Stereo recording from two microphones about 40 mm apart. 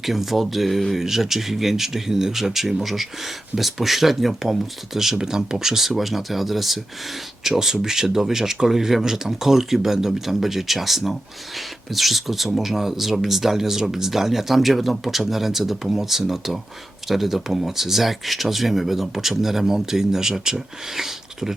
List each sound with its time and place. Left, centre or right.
0.0 s speech: centre